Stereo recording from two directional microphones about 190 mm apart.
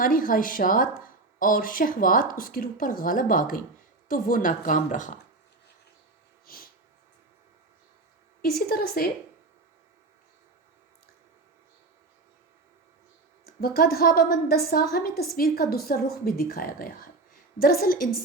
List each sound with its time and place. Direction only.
0.0 s speech: 45° left (ahead or behind)
6.4 s a sound: 50° left (ahead or behind)
8.4 s speech: 55° left (ahead or behind)
13.4 s speech: 50° left (ahead or behind)